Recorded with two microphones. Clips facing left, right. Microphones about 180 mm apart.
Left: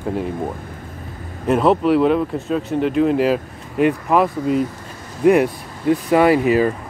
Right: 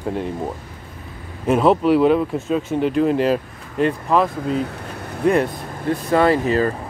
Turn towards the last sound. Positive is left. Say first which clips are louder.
# left 2 dB
turn(degrees=10)  # may be behind; listen again after turning